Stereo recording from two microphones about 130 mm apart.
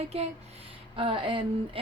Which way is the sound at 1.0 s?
40° right (ahead or behind).